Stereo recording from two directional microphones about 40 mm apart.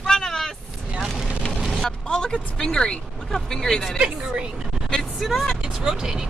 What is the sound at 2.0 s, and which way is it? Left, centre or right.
Speech, left.